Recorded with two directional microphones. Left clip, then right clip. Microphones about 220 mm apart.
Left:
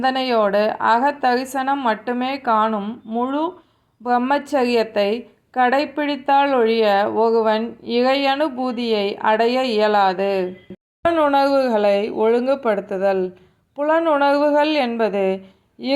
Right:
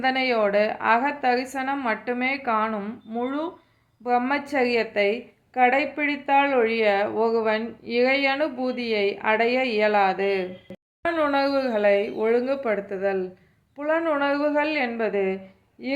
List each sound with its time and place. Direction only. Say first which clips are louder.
0.0 s a woman's voice: left 4 dB; 20° left (ahead or behind)